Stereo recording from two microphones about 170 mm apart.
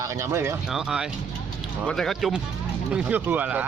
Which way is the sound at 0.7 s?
5° right (ahead or behind).